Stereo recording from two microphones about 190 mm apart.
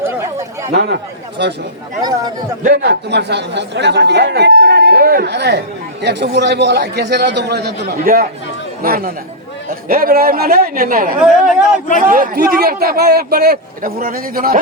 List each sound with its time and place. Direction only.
1.4 s speech: 60° right (ahead or behind)
2.0 s speech: 20° right (ahead or behind)
2.8 s a man's voice: 60° right (ahead or behind)
11.2 s speech: centre (ahead or behind)
11.9 s a man's voice: 45° right (ahead or behind)